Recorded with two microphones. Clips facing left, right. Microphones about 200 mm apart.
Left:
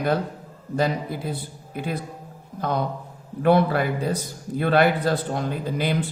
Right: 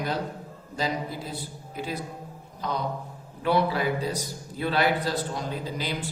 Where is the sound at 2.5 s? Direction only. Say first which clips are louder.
Left 5 dB; 55° left (ahead or behind).